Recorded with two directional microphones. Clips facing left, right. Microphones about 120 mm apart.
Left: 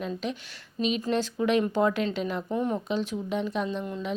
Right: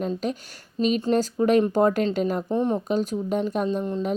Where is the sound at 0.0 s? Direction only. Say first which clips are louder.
Right 5 dB; 45° right (ahead or behind).